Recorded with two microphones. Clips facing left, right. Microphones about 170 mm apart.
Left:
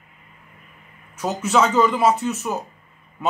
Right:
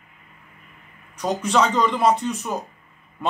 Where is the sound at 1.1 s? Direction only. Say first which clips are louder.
Left 1 dB; 5° left (ahead or behind).